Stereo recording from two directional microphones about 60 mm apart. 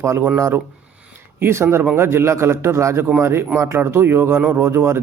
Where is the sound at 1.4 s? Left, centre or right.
Right.